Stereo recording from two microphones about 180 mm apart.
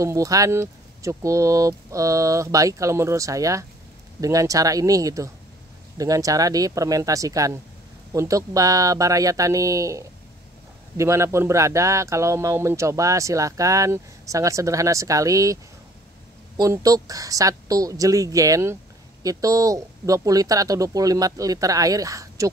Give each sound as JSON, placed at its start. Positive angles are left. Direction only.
{"t": 0.0, "sound": "speech", "side_deg": -20}